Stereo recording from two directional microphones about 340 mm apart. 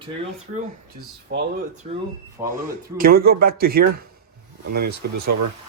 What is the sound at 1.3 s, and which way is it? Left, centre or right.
Speech, right.